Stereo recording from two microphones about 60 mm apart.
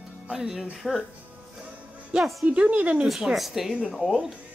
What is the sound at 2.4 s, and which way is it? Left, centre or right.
Speech, right.